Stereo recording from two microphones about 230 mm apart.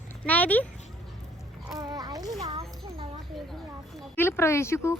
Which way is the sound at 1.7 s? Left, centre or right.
Centre.